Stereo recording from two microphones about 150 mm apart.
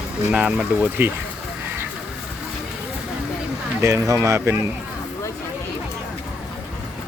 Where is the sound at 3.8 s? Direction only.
20° right (ahead or behind).